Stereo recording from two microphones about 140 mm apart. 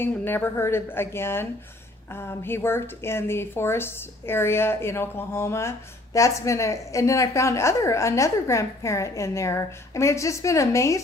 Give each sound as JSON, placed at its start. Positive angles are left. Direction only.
{"t": 0.0, "sound": "a woman's voice", "side_deg": 15}